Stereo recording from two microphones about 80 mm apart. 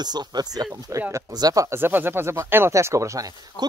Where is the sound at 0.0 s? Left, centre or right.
Right.